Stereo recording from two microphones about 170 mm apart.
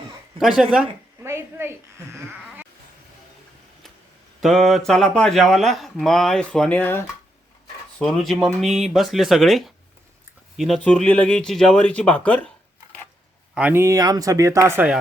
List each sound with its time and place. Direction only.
0.3 s a woman's voice: centre (ahead or behind)
4.4 s mantra: centre (ahead or behind)
4.9 s speech: 5° left (ahead or behind)
13.5 s speech: 10° right (ahead or behind)